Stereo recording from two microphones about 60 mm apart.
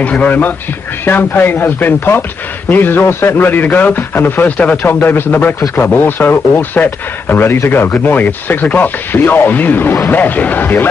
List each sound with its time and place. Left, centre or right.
0.0 s a man's voice: left
1.0 s speech: left
4.5 s speech: left